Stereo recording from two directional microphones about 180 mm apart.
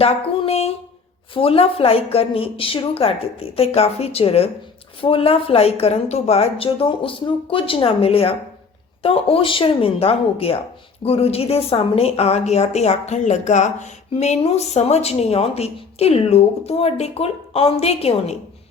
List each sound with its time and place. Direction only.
0.0 s a woman's voice: 35° left (ahead or behind)